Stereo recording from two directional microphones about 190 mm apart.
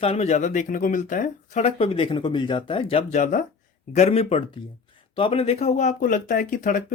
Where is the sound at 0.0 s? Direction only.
35° left (ahead or behind).